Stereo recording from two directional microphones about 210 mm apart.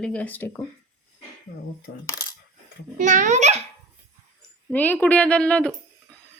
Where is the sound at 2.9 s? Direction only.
35° right (ahead or behind).